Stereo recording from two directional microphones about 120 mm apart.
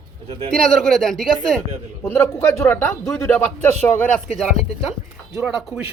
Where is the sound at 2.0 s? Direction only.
20° left (ahead or behind).